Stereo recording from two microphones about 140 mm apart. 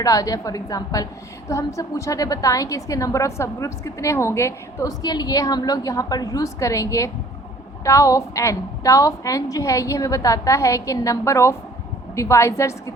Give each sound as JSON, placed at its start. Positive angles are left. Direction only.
{"t": 0.0, "sound": "a woman's voice", "side_deg": 25}